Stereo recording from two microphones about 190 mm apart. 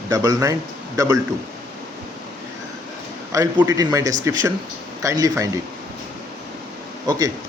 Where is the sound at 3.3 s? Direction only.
15° right (ahead or behind).